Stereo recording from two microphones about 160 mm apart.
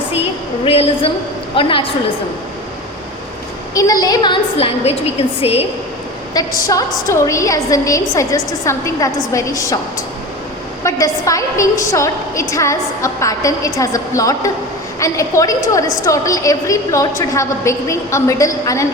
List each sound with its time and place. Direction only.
0.6 s a woman's voice: 35° left (ahead or behind)
3.8 s a woman's voice: 20° left (ahead or behind); by 5.6 s 40° left (ahead or behind)
6.3 s a woman's voice: 20° left (ahead or behind)
10.8 s a woman's voice: 20° left (ahead or behind)